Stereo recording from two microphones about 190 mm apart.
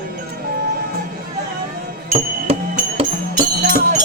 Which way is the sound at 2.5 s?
30° right (ahead or behind).